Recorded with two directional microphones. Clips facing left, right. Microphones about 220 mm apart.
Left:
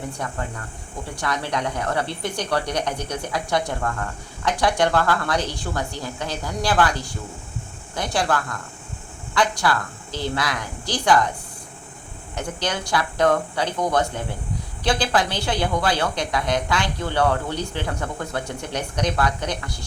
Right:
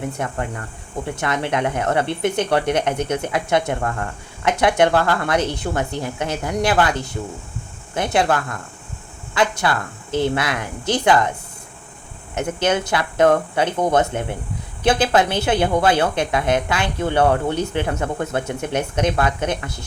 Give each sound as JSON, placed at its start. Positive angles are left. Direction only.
{"t": 1.1, "sound": "speech", "side_deg": -25}
{"t": 10.1, "sound": "a woman's voice", "side_deg": -55}
{"t": 10.3, "sound": "speech", "side_deg": -25}
{"t": 12.3, "sound": "speech", "side_deg": -25}